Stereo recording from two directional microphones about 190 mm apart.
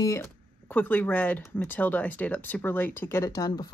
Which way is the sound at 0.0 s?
15° left (ahead or behind).